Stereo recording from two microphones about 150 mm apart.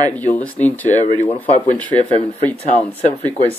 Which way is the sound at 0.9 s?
55° left (ahead or behind).